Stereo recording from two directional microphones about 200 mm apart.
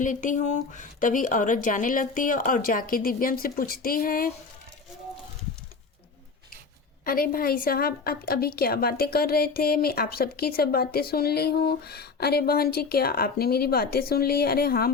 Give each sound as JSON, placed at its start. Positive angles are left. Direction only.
{"t": 0.0, "sound": "a woman's voice", "side_deg": 40}
{"t": 7.0, "sound": "a woman's voice", "side_deg": 45}